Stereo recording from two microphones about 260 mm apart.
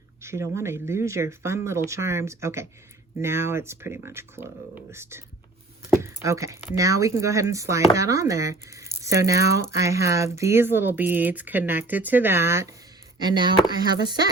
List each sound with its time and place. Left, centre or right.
0.2 s speech: centre